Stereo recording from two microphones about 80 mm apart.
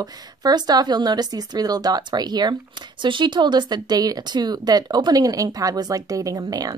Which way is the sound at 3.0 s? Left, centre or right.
Right.